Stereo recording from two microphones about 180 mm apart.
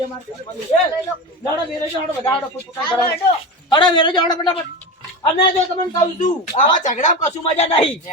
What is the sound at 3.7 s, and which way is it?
Speech, 25° left (ahead or behind).